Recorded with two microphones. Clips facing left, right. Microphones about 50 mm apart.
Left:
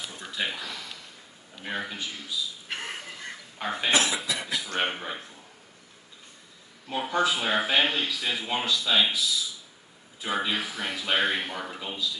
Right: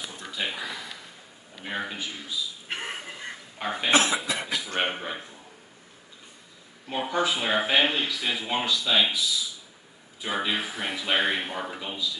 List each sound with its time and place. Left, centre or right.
0.3 s a sound: centre
0.6 s a sound: centre
1.6 s speech: centre
2.7 s fowl: right
3.6 s speech: centre
3.9 s speech: right
4.7 s speech: centre
6.9 s speech: centre
8.1 s speech: centre
10.2 s speech: centre
10.5 s speech: centre